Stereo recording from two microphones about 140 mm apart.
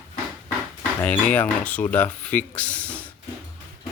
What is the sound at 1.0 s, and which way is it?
Speech, 10° left (ahead or behind).